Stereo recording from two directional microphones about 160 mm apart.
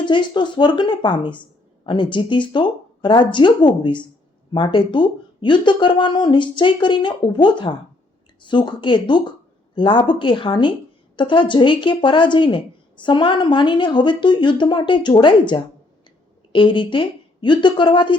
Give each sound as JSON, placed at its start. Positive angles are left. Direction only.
{"t": 0.0, "sound": "a woman's voice", "side_deg": 30}